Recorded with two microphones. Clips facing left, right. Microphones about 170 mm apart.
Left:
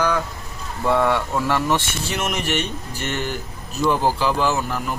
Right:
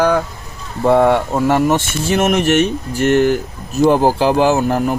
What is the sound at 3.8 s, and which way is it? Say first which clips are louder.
Speech: right 8 dB; 50° right (ahead or behind).